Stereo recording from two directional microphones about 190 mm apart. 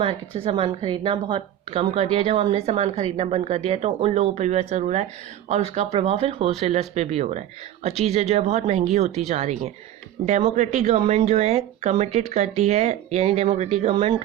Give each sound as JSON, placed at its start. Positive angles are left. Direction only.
{"t": 0.0, "sound": "a woman's voice", "side_deg": -30}